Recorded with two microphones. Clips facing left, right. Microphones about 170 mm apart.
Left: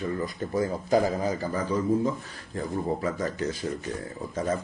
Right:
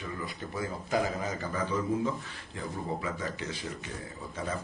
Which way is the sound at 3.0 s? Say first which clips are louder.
Left 7 dB; 40° left (ahead or behind).